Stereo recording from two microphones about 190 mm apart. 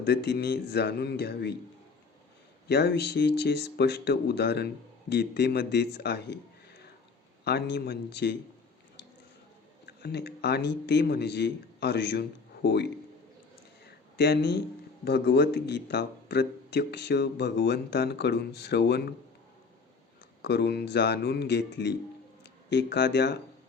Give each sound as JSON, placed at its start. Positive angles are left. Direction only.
{"t": 0.0, "sound": "speech", "side_deg": 60}
{"t": 2.6, "sound": "speech", "side_deg": 60}
{"t": 7.4, "sound": "speech", "side_deg": 60}
{"t": 9.8, "sound": "speech", "side_deg": 60}
{"t": 13.8, "sound": "a sound", "side_deg": 60}
{"t": 15.0, "sound": "speech", "side_deg": 60}
{"t": 20.4, "sound": "speech", "side_deg": 60}